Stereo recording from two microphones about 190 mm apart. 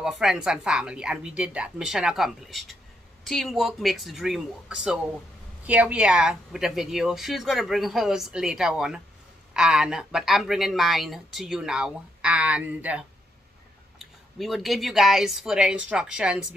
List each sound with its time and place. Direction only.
0.0 s speech: centre (ahead or behind)